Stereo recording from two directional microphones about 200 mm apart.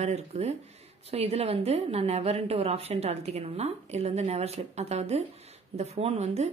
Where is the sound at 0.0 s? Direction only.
35° right (ahead or behind).